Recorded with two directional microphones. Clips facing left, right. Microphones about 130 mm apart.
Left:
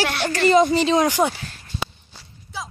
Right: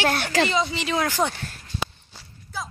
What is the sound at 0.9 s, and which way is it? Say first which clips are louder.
Speech: left 6 dB; 20° left (ahead or behind).